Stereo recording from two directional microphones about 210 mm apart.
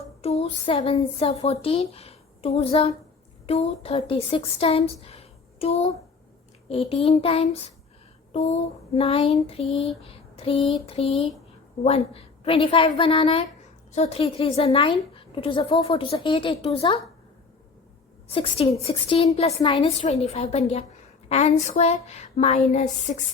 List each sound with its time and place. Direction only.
0.2 s a woman's voice: 30° left (ahead or behind)
10.0 s a sound: 25° left (ahead or behind)
10.8 s a woman's voice: 30° left (ahead or behind)
18.3 s a woman's voice: 25° left (ahead or behind)